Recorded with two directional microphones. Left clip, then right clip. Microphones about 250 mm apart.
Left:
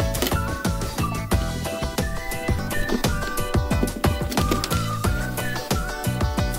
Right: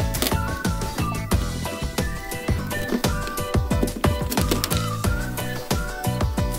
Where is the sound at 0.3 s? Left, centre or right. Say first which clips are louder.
Even; centre.